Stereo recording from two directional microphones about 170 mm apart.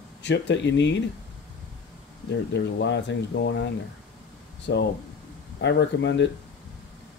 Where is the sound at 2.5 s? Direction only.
85° left.